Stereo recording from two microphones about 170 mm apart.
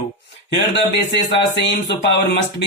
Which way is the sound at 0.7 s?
85° left.